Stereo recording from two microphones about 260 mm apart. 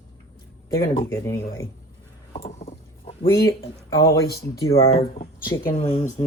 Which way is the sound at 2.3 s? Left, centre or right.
Left.